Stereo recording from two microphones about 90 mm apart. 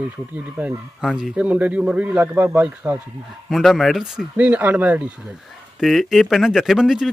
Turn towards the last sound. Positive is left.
turn(degrees=-5)  # may be behind; listen again after turning